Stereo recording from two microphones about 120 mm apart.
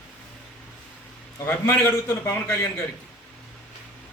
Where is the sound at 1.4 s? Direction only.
20° left (ahead or behind).